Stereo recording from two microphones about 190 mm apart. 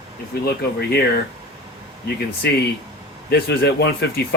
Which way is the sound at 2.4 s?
60° left (ahead or behind).